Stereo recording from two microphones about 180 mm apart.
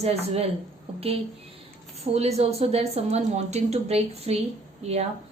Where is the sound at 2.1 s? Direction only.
35° right (ahead or behind).